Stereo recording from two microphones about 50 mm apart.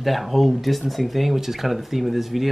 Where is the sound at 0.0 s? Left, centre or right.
Centre.